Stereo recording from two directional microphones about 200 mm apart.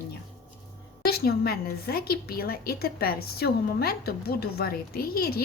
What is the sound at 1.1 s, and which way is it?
A woman's voice, 50° left (ahead or behind).